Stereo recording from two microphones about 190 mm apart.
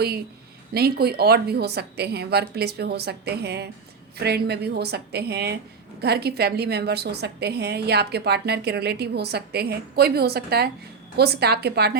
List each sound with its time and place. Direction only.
0.7 s a woman's voice: 55° right (ahead or behind)